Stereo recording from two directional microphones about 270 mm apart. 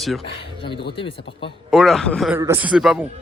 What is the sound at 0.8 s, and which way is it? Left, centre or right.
Speech, centre.